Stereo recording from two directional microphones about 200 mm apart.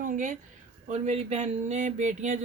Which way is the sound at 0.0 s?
40° right (ahead or behind).